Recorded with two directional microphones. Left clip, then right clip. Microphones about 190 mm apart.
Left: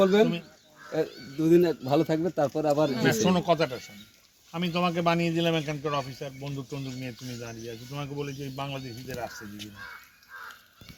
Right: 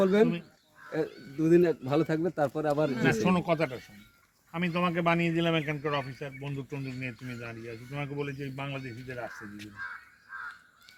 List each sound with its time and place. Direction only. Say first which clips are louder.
0.0 s speech: left 3 dB; 25° left (ahead or behind)
1.4 s speech: left 2 dB; 15° left (ahead or behind)
2.6 s speech: left 4 dB; 20° left (ahead or behind)
3.2 s a man's voice: left 3 dB; 25° right (ahead or behind)